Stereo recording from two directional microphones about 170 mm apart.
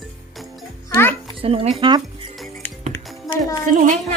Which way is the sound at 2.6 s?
10° left (ahead or behind).